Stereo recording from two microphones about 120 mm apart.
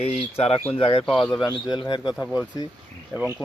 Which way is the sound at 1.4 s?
40° left (ahead or behind).